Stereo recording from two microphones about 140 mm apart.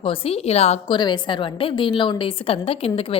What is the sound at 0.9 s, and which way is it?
A woman's voice, 30° left (ahead or behind).